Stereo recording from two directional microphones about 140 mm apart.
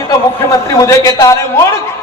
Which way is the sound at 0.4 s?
20° left (ahead or behind).